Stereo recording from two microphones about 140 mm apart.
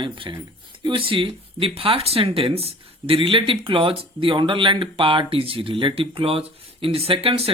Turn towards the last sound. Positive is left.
turn(degrees=-45)  # may be behind; listen again after turning